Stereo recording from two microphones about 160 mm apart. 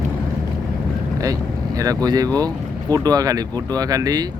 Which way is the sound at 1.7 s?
25° right (ahead or behind).